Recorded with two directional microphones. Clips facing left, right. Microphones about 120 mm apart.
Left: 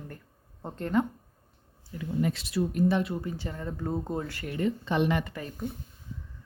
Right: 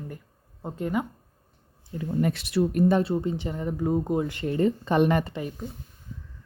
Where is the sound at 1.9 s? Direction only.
35° right (ahead or behind).